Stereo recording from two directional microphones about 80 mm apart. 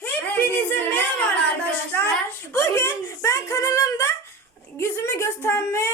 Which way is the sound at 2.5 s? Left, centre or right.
Left.